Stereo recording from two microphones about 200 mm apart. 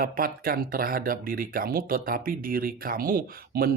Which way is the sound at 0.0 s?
45° right (ahead or behind).